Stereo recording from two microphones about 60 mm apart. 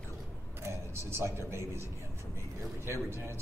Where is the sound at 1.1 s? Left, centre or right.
Right.